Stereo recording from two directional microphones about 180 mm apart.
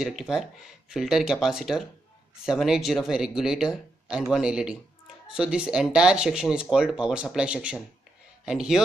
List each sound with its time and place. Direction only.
0.0 s speech: centre (ahead or behind)